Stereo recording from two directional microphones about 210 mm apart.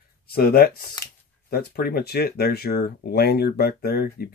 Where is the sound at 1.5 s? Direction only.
45° left (ahead or behind).